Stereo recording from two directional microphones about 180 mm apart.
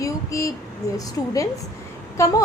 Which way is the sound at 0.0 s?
15° left (ahead or behind).